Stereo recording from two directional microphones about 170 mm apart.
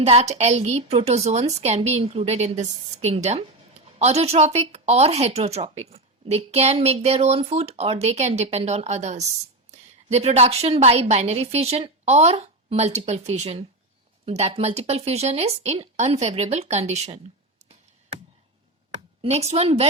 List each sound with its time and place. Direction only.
0.0 s a woman's voice: 40° right (ahead or behind)
18.9 s speech: 35° right (ahead or behind)